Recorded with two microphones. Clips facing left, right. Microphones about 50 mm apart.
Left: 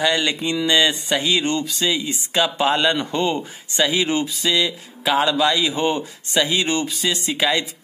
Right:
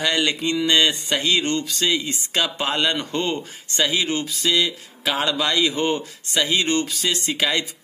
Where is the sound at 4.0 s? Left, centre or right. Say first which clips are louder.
Left 3 dB; centre.